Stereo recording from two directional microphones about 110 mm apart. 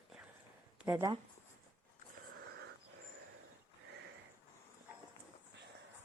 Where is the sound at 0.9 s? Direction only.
25° right (ahead or behind).